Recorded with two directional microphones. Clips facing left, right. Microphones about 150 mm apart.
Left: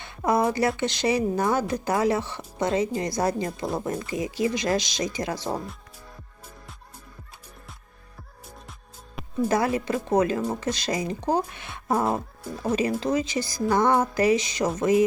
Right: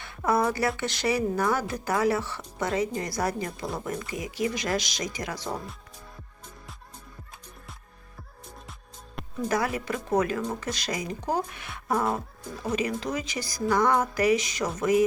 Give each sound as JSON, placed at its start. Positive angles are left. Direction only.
{"t": 0.0, "sound": "a sound", "side_deg": 20}
{"t": 0.8, "sound": "speech", "side_deg": 20}
{"t": 9.5, "sound": "speech", "side_deg": 25}